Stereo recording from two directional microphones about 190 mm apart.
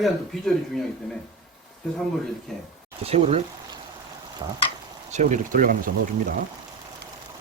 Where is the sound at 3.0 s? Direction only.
35° right (ahead or behind).